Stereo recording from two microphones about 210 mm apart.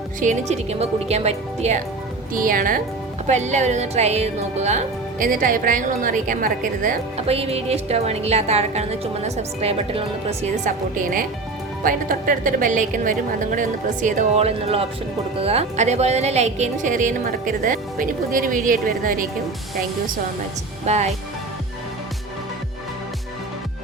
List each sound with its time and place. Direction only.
0.2 s a woman's voice: 35° right (ahead or behind)
20.8 s a woman's voice: 30° right (ahead or behind)